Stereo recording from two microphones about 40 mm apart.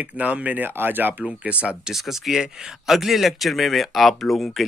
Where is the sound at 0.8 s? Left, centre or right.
Right.